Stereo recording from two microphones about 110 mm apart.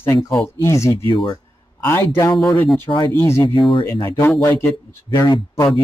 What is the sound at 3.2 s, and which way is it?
A man's voice, 25° left (ahead or behind).